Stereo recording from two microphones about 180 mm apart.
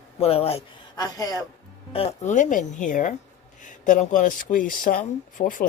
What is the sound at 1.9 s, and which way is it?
Speech, 35° left (ahead or behind).